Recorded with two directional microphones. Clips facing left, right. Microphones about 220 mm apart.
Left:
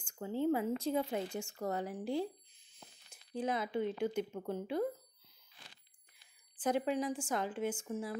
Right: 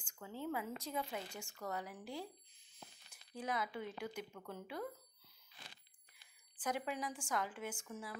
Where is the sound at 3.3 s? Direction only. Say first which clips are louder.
Left 7 dB; 25° left (ahead or behind).